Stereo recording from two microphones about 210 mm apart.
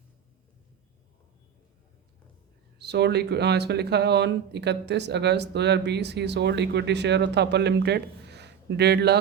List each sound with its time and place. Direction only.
2.7 s speech: 55° right (ahead or behind)